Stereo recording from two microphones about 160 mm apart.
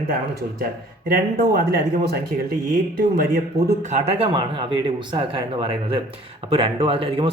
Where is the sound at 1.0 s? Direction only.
80° right.